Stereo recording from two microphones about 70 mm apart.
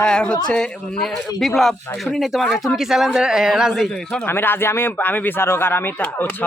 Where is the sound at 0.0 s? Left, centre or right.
Centre.